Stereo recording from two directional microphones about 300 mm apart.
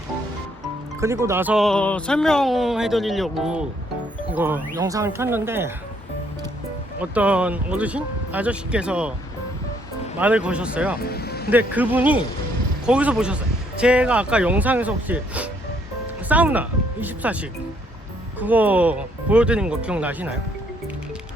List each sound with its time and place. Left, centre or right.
1.0 s speech: centre
7.0 s speech: centre
10.2 s speech: centre
11.0 s music: left
11.5 s speech: centre
18.3 s speech: centre